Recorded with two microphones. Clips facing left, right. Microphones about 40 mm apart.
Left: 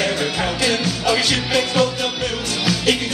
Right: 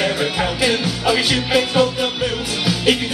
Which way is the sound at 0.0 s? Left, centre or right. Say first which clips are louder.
Right 1 dB; centre.